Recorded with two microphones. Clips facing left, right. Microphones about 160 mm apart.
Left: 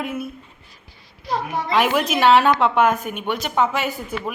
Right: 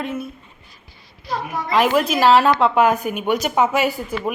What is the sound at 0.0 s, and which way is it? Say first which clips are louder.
Speech: right 1 dB; 5° left (ahead or behind).